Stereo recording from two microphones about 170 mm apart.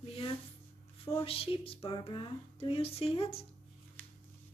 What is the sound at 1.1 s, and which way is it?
Speech, 35° left (ahead or behind).